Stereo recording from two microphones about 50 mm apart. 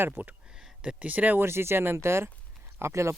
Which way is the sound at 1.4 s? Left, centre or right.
Right.